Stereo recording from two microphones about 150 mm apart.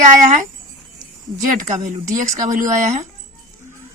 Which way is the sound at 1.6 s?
55° right (ahead or behind).